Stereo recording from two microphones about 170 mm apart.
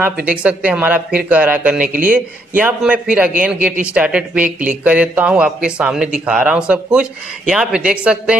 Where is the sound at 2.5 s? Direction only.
10° right (ahead or behind).